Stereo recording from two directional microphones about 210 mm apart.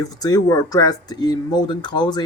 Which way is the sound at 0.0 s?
15° left (ahead or behind).